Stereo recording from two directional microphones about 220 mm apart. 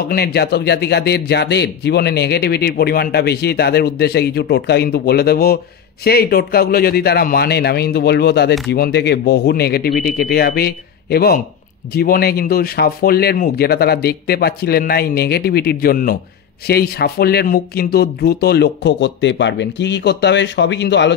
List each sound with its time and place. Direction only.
0.1 s speech: 45° left (ahead or behind)